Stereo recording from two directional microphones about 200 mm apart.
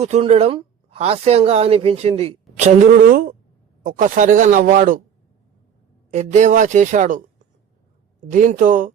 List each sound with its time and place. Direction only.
0.0 s a woman's voice: 30° right (ahead or behind)
6.1 s a woman's voice: 35° right (ahead or behind)
8.3 s a woman's voice: 40° right (ahead or behind)